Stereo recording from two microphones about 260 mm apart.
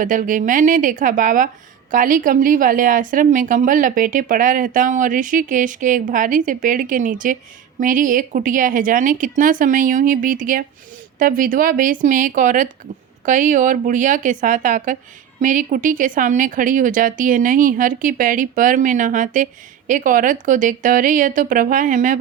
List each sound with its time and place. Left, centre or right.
0.0 s a woman's voice: right